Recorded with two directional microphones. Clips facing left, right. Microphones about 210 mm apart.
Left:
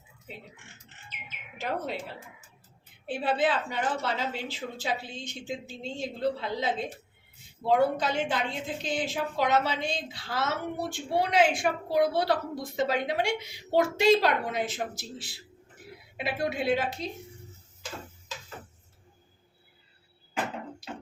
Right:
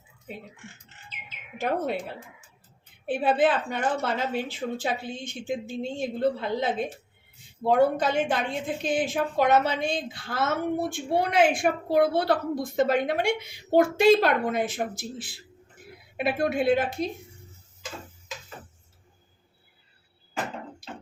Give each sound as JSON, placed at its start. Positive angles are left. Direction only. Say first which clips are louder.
{"t": 1.5, "sound": "a woman's voice", "louder": "right 5 dB", "side_deg": -55}
{"t": 3.1, "sound": "a woman's voice", "louder": "right 4 dB", "side_deg": -55}
{"t": 20.8, "sound": "music", "louder": "left 1 dB", "side_deg": -50}